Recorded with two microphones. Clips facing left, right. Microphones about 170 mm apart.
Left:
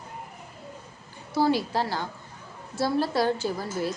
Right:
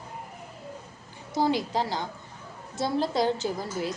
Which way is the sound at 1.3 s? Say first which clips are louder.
Left 2 dB; 20° right (ahead or behind).